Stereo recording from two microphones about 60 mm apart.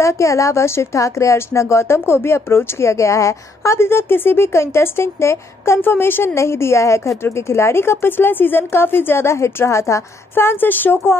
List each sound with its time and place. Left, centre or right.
0.0 s a woman's voice: left
5.8 s a woman's voice: left
10.3 s speech: left